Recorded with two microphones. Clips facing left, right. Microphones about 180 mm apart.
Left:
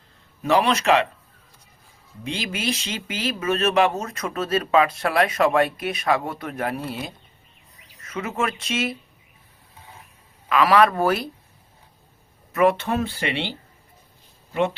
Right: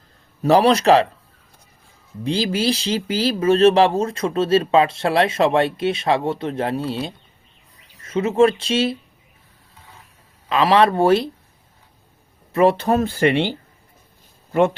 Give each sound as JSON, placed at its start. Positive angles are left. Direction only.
{"t": 0.4, "sound": "speech", "side_deg": -35}
{"t": 2.2, "sound": "speech", "side_deg": -35}
{"t": 10.5, "sound": "speech", "side_deg": -25}
{"t": 12.5, "sound": "speech", "side_deg": -35}
{"t": 14.5, "sound": "a man's voice", "side_deg": -50}